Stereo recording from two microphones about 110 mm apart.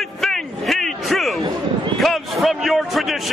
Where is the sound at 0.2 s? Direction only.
5° left (ahead or behind).